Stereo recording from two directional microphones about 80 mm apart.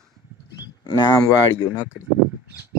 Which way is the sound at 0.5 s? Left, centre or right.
Left.